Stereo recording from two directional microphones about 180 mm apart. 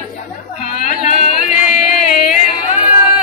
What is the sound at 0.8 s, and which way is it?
Music, 40° left (ahead or behind).